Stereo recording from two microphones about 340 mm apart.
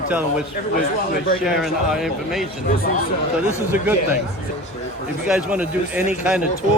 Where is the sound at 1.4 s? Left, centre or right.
Centre.